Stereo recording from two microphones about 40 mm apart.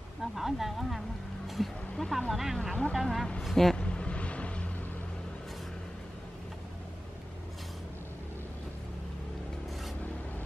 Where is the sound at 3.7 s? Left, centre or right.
Left.